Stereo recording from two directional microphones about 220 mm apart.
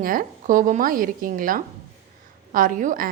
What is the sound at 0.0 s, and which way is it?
A woman's voice, 40° right (ahead or behind).